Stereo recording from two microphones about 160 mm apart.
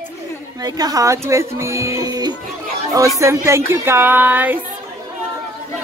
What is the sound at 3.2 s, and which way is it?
Music, 15° right (ahead or behind).